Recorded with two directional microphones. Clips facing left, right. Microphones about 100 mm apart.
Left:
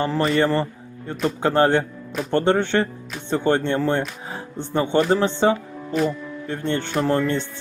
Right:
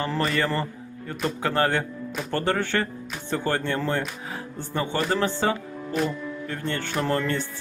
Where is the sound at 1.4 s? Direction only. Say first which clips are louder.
Left 6 dB; 25° left (ahead or behind).